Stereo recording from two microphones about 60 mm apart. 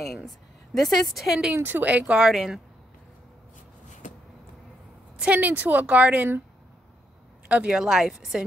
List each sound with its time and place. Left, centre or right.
0.0 s a woman's voice: centre
1.5 s a woman's voice: right
2.1 s speech: centre
5.1 s a woman's voice: right
7.4 s a woman's voice: centre